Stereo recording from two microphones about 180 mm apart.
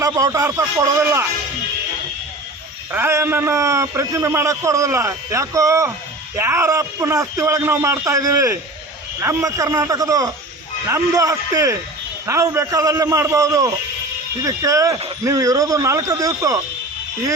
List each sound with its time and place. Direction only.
0.0 s a man's voice: 20° right (ahead or behind)
2.9 s a man's voice: 15° right (ahead or behind)